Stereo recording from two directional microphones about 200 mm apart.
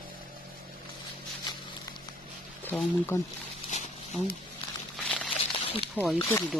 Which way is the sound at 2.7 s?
10° left (ahead or behind).